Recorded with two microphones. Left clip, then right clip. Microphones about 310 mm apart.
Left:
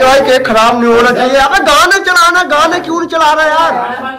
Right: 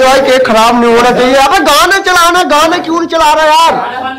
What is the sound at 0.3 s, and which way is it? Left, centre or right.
A man's voice, centre.